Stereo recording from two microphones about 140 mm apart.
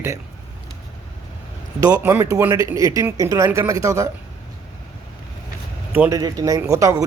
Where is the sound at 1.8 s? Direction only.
25° right (ahead or behind).